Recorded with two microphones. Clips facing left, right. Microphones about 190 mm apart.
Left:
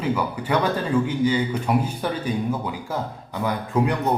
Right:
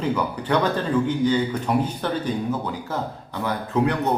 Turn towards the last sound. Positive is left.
turn(degrees=10)  # may be behind; listen again after turning